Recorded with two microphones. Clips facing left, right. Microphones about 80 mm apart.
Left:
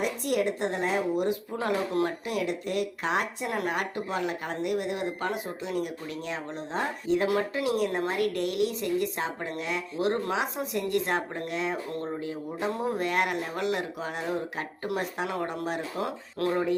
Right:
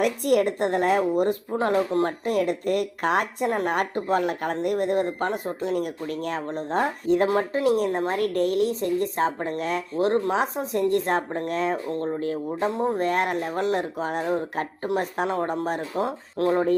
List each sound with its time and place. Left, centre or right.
0.0 s speech: right
2.0 s speech: right
7.3 s a woman's voice: right